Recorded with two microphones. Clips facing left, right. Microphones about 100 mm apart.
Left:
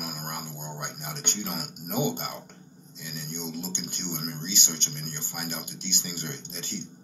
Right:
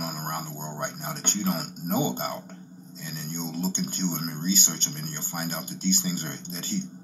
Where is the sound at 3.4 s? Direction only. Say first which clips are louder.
Right 7 dB; 35° right (ahead or behind).